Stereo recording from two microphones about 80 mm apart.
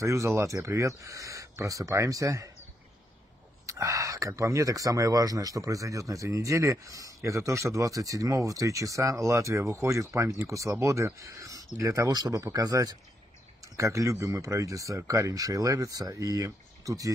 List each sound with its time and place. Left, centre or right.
0.0 s speech: right
3.6 s speech: right
12.1 s speech: right